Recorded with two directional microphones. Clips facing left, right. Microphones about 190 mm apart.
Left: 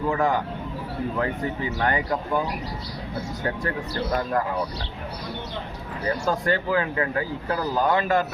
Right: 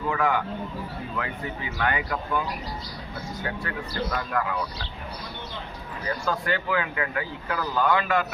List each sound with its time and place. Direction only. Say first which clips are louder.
0.1 s speech: left 1 dB; 40° left (ahead or behind)
1.8 s speech: left 2 dB; 35° left (ahead or behind)
3.4 s speech: left 5 dB; 40° left (ahead or behind)
6.2 s speech: left 3 dB; 40° left (ahead or behind)